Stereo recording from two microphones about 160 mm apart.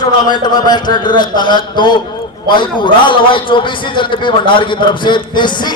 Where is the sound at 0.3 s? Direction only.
25° left (ahead or behind).